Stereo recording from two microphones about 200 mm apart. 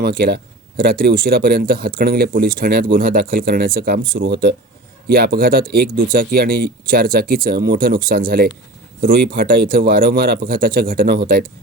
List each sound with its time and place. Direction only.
0.0 s speech: 50° right (ahead or behind)